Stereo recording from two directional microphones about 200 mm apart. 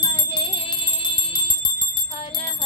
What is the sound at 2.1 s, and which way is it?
Bell, 25° left (ahead or behind).